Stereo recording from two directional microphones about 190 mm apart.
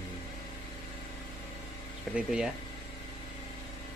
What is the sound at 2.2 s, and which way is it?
Speech, 5° right (ahead or behind).